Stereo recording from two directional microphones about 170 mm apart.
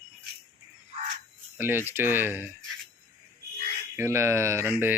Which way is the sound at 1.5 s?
10° right (ahead or behind).